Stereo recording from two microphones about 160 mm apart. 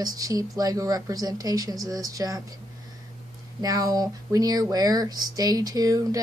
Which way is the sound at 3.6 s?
25° right (ahead or behind).